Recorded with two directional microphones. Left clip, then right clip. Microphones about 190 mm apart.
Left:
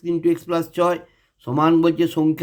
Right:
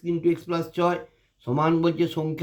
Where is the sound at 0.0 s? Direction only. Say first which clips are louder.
Left 4 dB; 45° left (ahead or behind).